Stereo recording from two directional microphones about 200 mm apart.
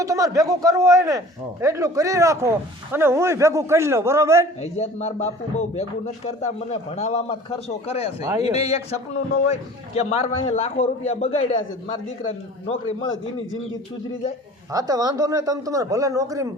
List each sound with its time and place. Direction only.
0.0 s speech: 15° right (ahead or behind)
4.6 s a man's voice: 35° left (ahead or behind)
8.2 s speech: 20° right (ahead or behind)
8.5 s a man's voice: 30° left (ahead or behind)
14.7 s speech: 20° right (ahead or behind)